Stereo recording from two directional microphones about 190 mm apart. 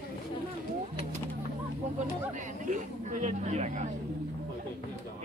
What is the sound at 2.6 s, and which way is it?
Vehicle, 40° right (ahead or behind).